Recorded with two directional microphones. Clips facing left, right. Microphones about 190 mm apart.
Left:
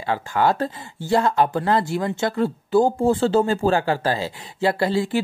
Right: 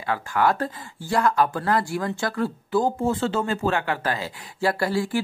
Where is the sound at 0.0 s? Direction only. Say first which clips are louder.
Left 2 dB; 25° left (ahead or behind).